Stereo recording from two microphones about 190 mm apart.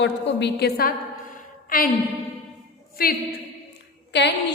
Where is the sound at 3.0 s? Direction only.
50° left (ahead or behind).